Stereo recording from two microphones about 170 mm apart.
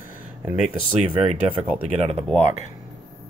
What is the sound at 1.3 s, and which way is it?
Speech, 35° right (ahead or behind).